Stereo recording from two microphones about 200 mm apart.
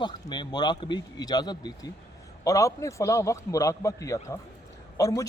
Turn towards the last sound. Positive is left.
turn(degrees=15)  # may be behind; listen again after turning